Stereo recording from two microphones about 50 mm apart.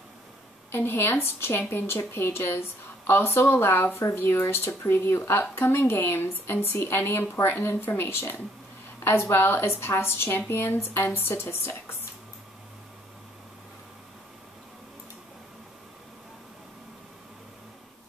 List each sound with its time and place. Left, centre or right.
0.7 s a woman's voice: left